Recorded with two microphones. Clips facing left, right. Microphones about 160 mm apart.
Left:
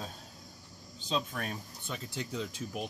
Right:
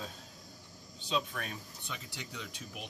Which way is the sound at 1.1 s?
40° left (ahead or behind).